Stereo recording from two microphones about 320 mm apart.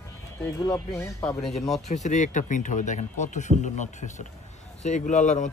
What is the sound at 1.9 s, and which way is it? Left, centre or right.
Speech, left.